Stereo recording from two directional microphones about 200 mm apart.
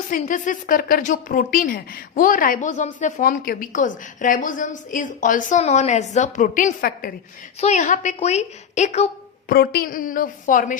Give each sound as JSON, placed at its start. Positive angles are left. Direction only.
{"t": 0.1, "sound": "a woman's voice", "side_deg": 40}
{"t": 9.5, "sound": "a woman's voice", "side_deg": 50}